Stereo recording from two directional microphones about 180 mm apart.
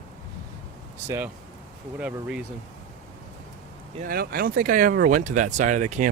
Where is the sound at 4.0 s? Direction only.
55° right (ahead or behind).